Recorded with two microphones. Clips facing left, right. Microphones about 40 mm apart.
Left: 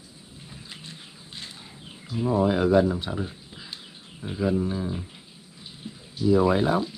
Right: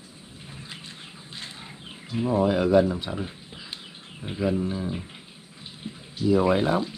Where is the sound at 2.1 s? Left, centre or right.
Right.